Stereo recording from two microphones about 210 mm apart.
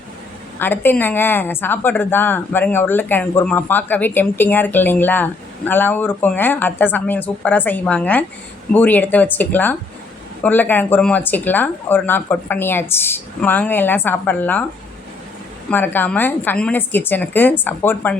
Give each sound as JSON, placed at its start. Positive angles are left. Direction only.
{"t": 0.6, "sound": "a woman's voice", "side_deg": 10}
{"t": 15.7, "sound": "a woman's voice", "side_deg": 10}